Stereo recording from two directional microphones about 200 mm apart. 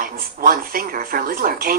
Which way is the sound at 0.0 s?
45° right (ahead or behind).